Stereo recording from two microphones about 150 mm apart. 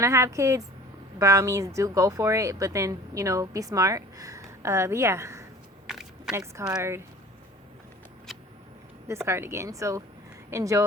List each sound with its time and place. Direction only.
0.0 s speech: 20° right (ahead or behind)
5.9 s a sound: 5° right (ahead or behind)
6.3 s speech: 20° right (ahead or behind)
8.3 s vehicle: centre (ahead or behind)
9.0 s speech: 15° right (ahead or behind)